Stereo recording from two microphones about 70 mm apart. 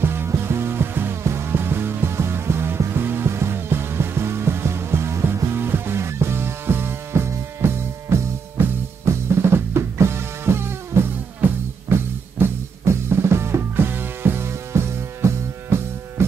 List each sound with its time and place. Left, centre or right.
0.0 s music: right